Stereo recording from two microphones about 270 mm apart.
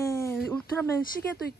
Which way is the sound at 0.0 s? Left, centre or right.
Centre.